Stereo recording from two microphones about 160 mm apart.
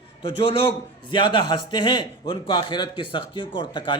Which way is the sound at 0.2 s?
30° left (ahead or behind).